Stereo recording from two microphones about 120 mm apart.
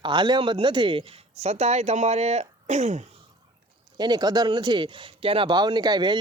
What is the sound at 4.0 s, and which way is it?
Speech, 35° right (ahead or behind).